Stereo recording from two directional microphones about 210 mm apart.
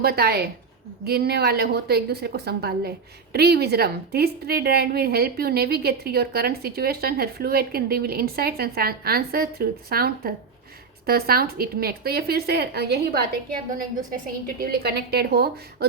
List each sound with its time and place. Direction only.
0.0 s a woman's voice: 50° right (ahead or behind)